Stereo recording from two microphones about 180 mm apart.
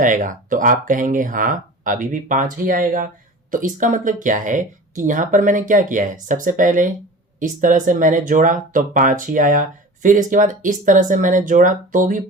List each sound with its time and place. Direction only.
0.0 s speech: 45° right (ahead or behind)